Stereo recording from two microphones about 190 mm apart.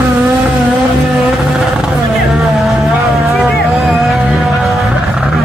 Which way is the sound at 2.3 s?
Centre (ahead or behind).